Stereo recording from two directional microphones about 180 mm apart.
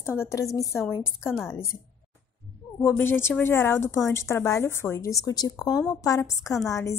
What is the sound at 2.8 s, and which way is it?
A woman's voice, 15° left (ahead or behind).